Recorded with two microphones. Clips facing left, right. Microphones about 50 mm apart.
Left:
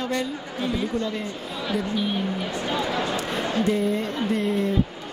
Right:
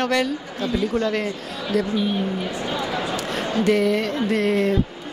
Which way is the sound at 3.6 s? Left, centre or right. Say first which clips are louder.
Right 5 dB; right.